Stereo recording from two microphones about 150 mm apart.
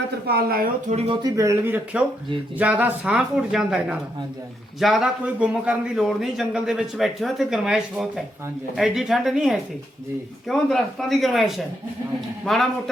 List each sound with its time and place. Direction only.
0.3 s speech: 90° right
0.9 s speech: 40° right (ahead or behind)
1.2 s a man's voice: 20° right (ahead or behind); by 11.6 s centre (ahead or behind)